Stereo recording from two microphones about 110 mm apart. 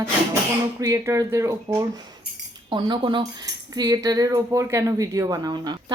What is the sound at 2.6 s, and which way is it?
Speech, 45° right (ahead or behind).